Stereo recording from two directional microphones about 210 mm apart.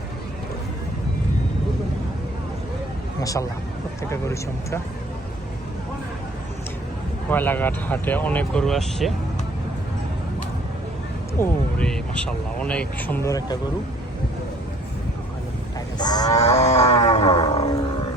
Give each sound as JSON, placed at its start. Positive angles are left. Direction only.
{"t": 3.2, "sound": "speech", "side_deg": 15}
{"t": 7.3, "sound": "speech", "side_deg": 10}
{"t": 11.3, "sound": "speech", "side_deg": 5}
{"t": 16.0, "sound": "cattle", "side_deg": 20}
{"t": 16.3, "sound": "wild animals", "side_deg": 30}